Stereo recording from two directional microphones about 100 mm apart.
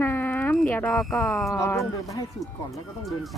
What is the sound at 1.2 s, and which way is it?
Speech, 5° left (ahead or behind).